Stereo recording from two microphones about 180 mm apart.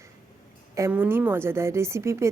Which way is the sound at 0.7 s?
15° right (ahead or behind).